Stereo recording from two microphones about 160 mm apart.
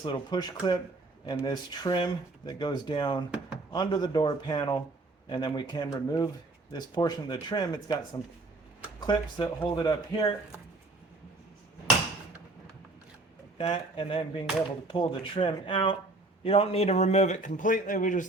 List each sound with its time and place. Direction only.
0.0 s speech: 25° left (ahead or behind)
9.0 s speech: 25° left (ahead or behind)
13.6 s a man's voice: 35° left (ahead or behind); by 18.3 s 55° left (ahead or behind)